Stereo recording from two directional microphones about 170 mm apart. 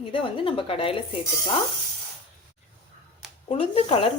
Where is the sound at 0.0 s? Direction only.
30° left (ahead or behind).